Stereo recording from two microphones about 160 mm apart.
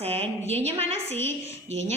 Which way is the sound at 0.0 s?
40° right (ahead or behind).